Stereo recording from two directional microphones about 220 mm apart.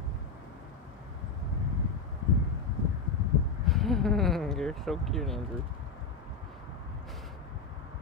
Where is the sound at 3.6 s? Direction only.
Centre (ahead or behind).